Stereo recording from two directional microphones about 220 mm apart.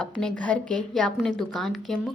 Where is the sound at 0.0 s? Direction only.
5° left (ahead or behind).